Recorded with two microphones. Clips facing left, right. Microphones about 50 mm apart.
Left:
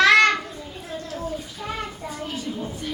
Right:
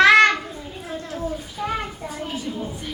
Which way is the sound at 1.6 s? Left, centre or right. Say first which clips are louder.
Right 7 dB; centre.